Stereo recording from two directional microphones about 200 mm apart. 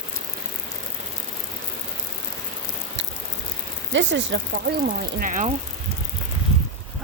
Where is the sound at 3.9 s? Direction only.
65° right (ahead or behind).